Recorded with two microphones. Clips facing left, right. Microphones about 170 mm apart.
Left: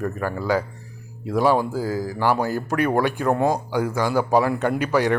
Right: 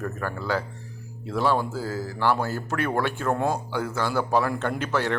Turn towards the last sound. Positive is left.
turn(degrees=10)  # may be behind; listen again after turning